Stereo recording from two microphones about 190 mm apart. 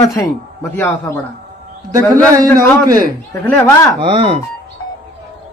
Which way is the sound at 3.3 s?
10° left (ahead or behind).